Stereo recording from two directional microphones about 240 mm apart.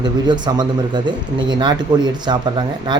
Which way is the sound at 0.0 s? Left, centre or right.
Centre.